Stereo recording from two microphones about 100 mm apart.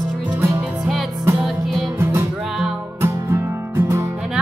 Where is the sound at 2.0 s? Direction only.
30° right (ahead or behind).